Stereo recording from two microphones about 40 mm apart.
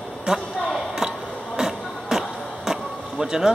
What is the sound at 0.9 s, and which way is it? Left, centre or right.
Music, centre.